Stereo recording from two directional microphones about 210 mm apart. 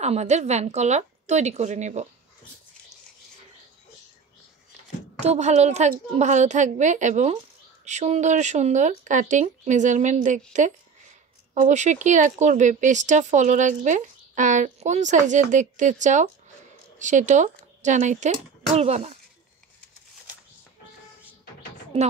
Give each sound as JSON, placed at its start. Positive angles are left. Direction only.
{"t": 0.0, "sound": "speech", "side_deg": -30}
{"t": 5.2, "sound": "speech", "side_deg": -30}